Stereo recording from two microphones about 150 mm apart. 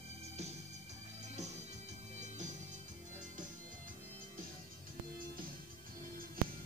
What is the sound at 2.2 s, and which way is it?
Music, 50° right (ahead or behind).